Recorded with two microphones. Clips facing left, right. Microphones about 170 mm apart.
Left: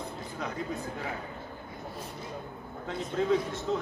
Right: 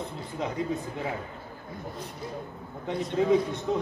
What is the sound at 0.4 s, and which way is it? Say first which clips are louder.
Speech: right 5 dB; 20° right (ahead or behind).